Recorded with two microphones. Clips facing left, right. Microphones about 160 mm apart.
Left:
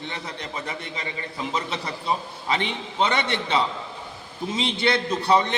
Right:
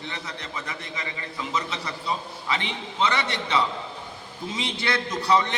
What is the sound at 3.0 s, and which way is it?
Speech, 25° left (ahead or behind).